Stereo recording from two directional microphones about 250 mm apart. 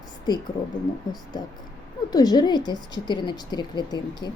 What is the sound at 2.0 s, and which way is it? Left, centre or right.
Speech, centre.